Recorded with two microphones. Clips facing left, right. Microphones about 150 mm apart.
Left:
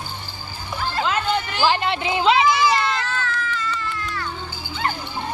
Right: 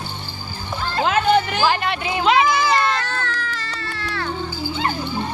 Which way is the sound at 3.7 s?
75° right (ahead or behind).